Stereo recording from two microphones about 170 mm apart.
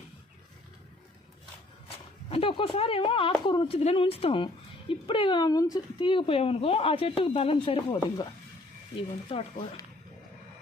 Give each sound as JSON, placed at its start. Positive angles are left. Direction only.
{"t": 2.3, "sound": "speech", "side_deg": 30}
{"t": 9.0, "sound": "speech", "side_deg": 30}